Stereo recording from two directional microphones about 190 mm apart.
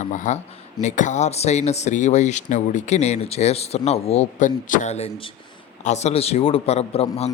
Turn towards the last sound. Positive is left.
turn(degrees=30)  # may be behind; listen again after turning